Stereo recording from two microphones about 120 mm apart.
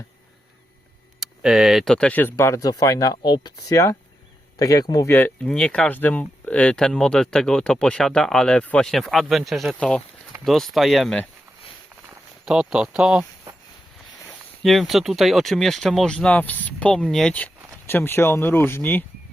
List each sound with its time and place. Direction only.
1.2 s speech: 5° right (ahead or behind); by 2.3 s 15° left (ahead or behind)
2.3 s speech: 25° left (ahead or behind)
5.0 s speech: 15° left (ahead or behind)
12.5 s speech: 5° right (ahead or behind)
14.6 s speech: centre (ahead or behind)
17.8 s speech: 20° left (ahead or behind)